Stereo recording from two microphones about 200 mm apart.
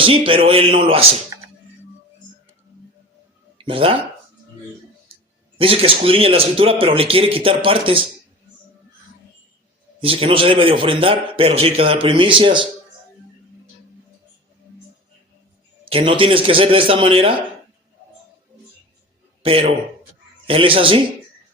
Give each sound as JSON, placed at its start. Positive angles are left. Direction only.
{"t": 0.0, "sound": "a man's voice", "side_deg": -25}
{"t": 3.6, "sound": "speech", "side_deg": -25}
{"t": 5.5, "sound": "a man's voice", "side_deg": -30}
{"t": 10.0, "sound": "a man's voice", "side_deg": -25}
{"t": 15.8, "sound": "a man's voice", "side_deg": -25}
{"t": 19.5, "sound": "a man's voice", "side_deg": -30}